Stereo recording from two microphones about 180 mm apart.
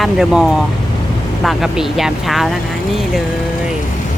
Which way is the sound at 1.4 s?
Centre (ahead or behind).